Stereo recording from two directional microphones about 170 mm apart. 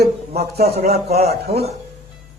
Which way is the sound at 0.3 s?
65° right (ahead or behind).